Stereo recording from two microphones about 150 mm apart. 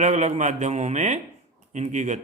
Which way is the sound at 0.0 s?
50° right (ahead or behind).